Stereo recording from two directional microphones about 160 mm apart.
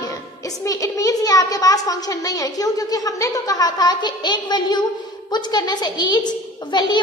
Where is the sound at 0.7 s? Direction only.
20° left (ahead or behind).